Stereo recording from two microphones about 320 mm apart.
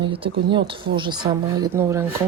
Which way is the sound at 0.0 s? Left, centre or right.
Centre.